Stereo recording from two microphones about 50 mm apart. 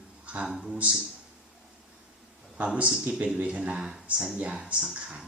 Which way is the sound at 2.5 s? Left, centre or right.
Right.